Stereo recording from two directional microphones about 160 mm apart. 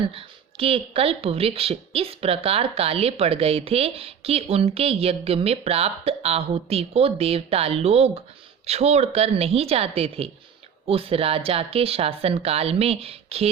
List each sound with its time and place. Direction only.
0.1 s speech: 35° right (ahead or behind)